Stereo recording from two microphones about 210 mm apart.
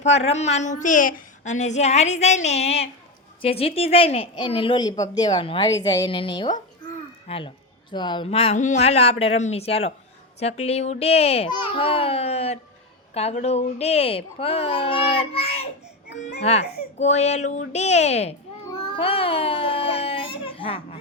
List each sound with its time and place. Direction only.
0.0 s a woman's voice: 30° left (ahead or behind)
18.7 s baby cry: 25° left (ahead or behind)